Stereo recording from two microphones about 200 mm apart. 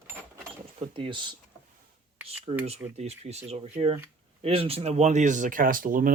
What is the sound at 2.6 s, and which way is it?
Speech, 30° right (ahead or behind).